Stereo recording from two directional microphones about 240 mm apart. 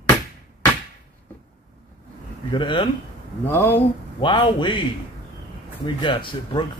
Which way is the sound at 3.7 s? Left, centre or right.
Centre.